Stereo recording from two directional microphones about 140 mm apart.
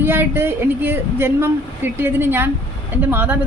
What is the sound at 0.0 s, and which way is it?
A woman's voice, 15° right (ahead or behind).